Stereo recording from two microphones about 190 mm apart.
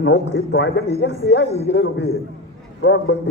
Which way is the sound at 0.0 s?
70° left (ahead or behind).